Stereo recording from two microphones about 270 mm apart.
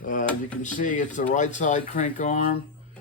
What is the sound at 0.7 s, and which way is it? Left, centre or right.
Speech, left.